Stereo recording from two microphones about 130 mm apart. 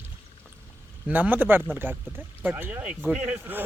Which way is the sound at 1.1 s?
10° right (ahead or behind).